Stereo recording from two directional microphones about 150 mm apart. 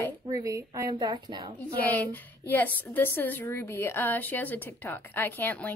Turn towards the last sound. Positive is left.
turn(degrees=10)  # may be behind; listen again after turning